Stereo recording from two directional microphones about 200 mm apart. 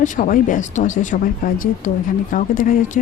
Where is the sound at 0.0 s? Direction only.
40° left (ahead or behind).